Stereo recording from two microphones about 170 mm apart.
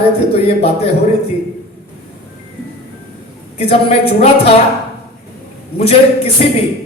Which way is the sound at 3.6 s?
35° left (ahead or behind).